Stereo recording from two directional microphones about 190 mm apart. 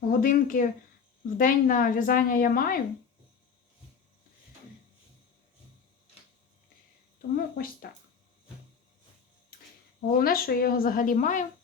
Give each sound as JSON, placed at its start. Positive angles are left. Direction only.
{"t": 0.1, "sound": "a woman's voice", "side_deg": 50}
{"t": 7.2, "sound": "a woman's voice", "side_deg": 50}
{"t": 10.1, "sound": "a woman's voice", "side_deg": 50}